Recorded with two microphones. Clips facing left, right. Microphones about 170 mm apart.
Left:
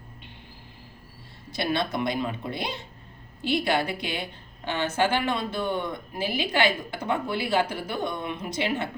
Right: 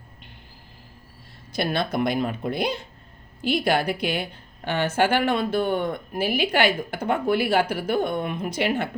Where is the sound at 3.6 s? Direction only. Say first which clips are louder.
Right 4 dB; 50° right (ahead or behind).